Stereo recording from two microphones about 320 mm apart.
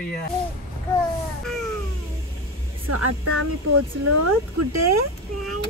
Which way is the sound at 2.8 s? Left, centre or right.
Right.